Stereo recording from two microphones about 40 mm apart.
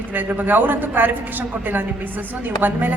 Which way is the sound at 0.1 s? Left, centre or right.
Right.